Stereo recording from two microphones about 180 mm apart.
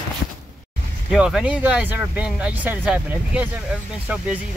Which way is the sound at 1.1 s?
5° right (ahead or behind).